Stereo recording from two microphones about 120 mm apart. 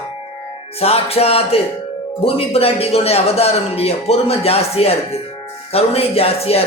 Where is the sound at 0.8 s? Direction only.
55° left (ahead or behind).